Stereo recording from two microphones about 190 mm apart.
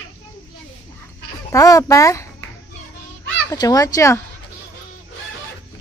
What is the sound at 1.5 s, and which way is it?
Speech, 15° left (ahead or behind).